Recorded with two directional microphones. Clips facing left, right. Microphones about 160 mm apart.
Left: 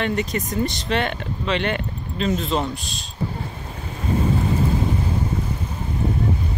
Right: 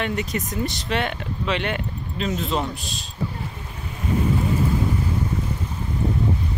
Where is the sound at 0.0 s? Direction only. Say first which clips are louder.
Left 2 dB; 5° right (ahead or behind).